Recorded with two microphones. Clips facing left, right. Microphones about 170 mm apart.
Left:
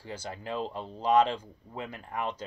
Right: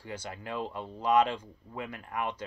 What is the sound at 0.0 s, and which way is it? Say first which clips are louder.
Speech: left 1 dB; 30° left (ahead or behind).